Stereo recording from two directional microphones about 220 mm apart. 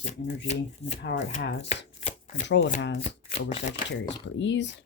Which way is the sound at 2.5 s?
55° left (ahead or behind).